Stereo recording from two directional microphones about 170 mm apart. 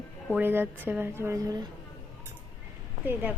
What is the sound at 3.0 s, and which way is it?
Speech, 10° right (ahead or behind).